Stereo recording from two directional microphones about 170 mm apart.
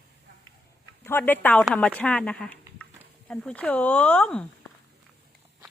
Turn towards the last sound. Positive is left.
turn(degrees=5)  # may be behind; listen again after turning